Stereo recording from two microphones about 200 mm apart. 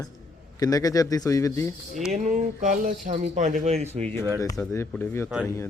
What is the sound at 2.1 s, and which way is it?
Speech, 35° right (ahead or behind).